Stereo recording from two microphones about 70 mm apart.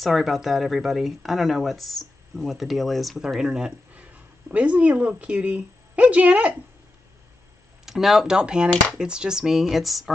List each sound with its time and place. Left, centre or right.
0.0 s speech: centre
4.5 s a woman's voice: right
7.8 s speech: centre